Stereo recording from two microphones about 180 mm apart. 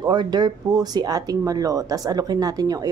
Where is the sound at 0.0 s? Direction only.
25° right (ahead or behind).